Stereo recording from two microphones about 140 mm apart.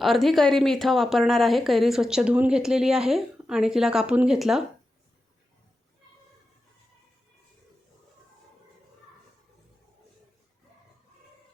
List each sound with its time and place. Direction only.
0.0 s speech: centre (ahead or behind)